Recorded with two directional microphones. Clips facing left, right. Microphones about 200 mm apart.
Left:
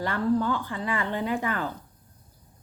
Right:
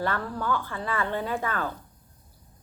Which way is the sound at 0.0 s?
15° left (ahead or behind).